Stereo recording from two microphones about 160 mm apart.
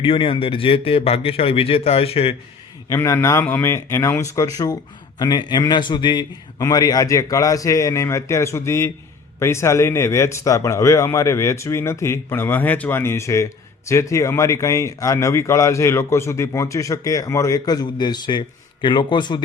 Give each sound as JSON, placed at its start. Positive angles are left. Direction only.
{"t": 0.0, "sound": "a man's voice", "side_deg": 35}
{"t": 2.9, "sound": "a man's voice", "side_deg": 15}